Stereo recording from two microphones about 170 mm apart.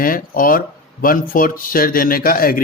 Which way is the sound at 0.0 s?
55° left (ahead or behind).